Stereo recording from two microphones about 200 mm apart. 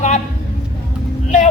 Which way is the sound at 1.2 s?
40° left (ahead or behind).